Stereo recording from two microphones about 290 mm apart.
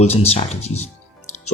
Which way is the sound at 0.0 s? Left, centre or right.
Left.